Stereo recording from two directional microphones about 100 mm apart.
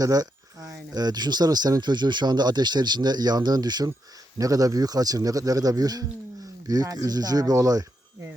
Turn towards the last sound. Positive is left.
turn(degrees=-40)  # may be behind; listen again after turning